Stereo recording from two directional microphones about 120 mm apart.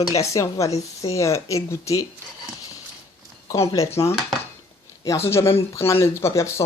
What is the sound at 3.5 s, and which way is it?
Speech, 30° left (ahead or behind).